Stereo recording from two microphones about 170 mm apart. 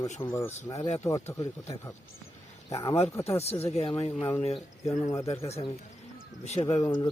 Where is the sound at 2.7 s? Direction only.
35° left (ahead or behind).